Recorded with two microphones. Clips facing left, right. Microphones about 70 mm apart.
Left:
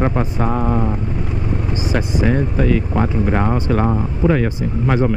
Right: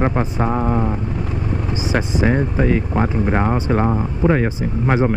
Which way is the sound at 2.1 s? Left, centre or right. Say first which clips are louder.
Even; right.